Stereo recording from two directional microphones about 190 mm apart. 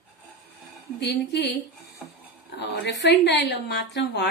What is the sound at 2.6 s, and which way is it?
A woman's voice, 65° left (ahead or behind).